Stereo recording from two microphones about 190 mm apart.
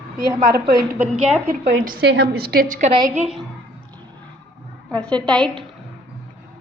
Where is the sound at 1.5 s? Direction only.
45° right (ahead or behind).